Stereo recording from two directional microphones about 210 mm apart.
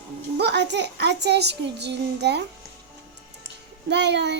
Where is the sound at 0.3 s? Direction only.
55° right (ahead or behind).